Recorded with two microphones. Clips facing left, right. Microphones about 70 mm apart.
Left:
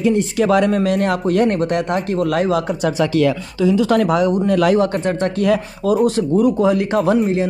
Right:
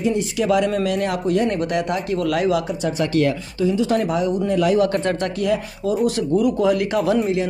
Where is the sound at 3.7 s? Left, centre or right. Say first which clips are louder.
Left 5 dB; left.